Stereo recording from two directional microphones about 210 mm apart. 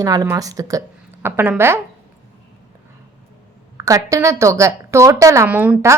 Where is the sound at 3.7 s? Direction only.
15° right (ahead or behind).